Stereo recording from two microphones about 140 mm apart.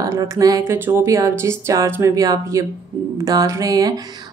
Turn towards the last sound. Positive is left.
turn(degrees=-25)  # may be behind; listen again after turning